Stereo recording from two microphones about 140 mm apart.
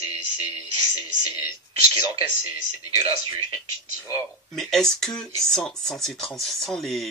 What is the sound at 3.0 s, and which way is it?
Speech, 40° right (ahead or behind).